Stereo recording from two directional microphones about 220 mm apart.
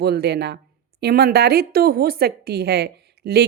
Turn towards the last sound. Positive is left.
turn(degrees=-50)  # may be behind; listen again after turning